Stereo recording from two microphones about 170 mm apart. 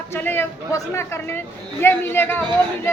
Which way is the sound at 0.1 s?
10° left (ahead or behind).